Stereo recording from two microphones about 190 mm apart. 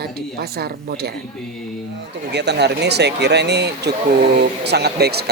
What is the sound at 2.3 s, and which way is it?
Speech, 60° right (ahead or behind).